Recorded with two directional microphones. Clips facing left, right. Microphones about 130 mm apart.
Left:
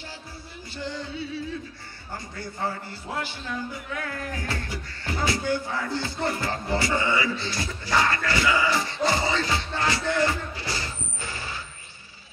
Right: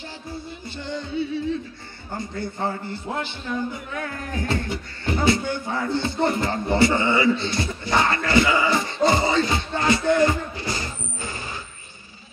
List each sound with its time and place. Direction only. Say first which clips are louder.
2.1 s a man's voice: right 6 dB; 25° right (ahead or behind)